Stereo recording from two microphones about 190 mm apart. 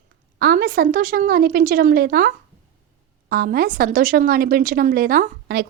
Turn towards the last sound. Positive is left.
turn(degrees=-55)  # may be behind; listen again after turning